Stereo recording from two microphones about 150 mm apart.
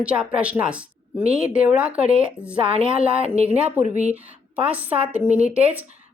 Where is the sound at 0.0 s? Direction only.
5° right (ahead or behind).